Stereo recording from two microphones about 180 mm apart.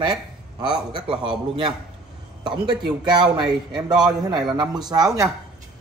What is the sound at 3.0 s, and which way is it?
Speech, 25° right (ahead or behind).